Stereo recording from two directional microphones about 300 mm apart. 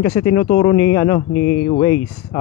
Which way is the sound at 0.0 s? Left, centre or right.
Centre.